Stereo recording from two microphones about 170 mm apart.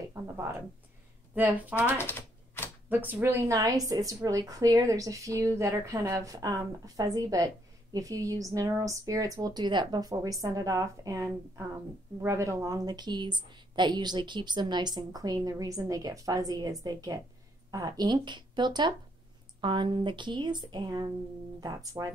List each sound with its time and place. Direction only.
0.1 s speech: 15° right (ahead or behind)
2.0 s typewriter: 15° left (ahead or behind)
2.9 s a woman's voice: 10° right (ahead or behind)